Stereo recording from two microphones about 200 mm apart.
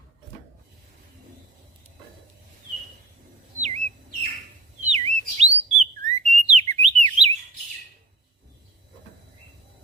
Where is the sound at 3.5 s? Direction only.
35° right (ahead or behind).